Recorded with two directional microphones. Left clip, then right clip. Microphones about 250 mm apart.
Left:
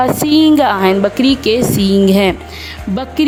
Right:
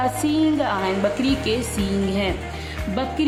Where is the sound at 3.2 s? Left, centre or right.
Left.